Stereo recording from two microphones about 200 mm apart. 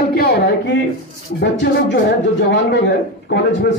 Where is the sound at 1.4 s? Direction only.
60° left (ahead or behind).